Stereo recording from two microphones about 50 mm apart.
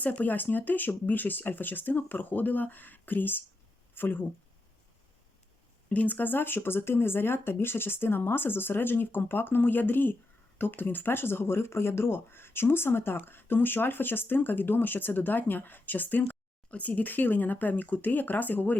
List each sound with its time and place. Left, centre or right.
0.0 s speech: left
5.9 s speech: left